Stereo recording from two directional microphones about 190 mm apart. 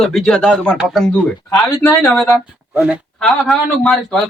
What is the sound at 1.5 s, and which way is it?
Speech, 15° left (ahead or behind).